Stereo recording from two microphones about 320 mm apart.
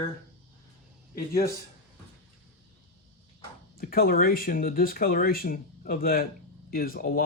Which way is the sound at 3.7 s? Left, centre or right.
Left.